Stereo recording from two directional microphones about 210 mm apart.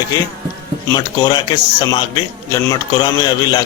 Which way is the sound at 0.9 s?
20° left (ahead or behind).